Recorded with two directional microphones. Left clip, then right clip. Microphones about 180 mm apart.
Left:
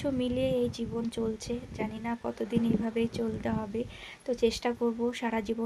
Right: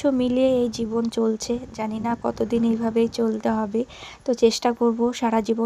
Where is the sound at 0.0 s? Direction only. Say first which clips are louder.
Right 10 dB; 40° right (ahead or behind).